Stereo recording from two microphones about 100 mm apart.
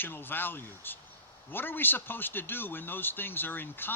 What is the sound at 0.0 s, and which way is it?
A man's voice, 20° left (ahead or behind).